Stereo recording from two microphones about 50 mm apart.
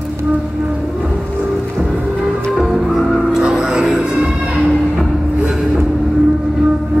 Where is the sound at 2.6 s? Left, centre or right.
Centre.